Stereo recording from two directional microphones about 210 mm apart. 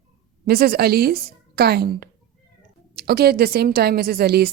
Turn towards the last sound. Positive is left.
turn(degrees=-45)  # may be behind; listen again after turning